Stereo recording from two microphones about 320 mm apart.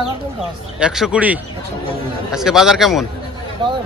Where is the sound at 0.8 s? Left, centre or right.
Centre.